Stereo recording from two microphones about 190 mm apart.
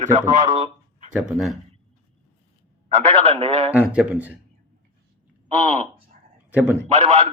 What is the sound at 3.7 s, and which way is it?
Speech, 5° right (ahead or behind).